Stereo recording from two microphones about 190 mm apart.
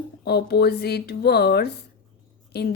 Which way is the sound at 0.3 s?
55° left (ahead or behind).